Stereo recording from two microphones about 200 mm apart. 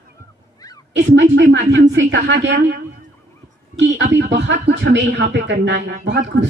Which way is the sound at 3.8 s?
60° right (ahead or behind).